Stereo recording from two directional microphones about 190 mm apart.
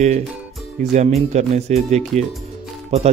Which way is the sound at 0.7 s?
40° right (ahead or behind).